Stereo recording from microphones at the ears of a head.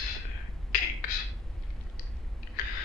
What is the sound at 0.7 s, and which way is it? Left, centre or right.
Beatboxing, left.